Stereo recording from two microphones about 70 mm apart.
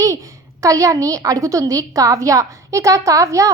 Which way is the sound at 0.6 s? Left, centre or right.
Right.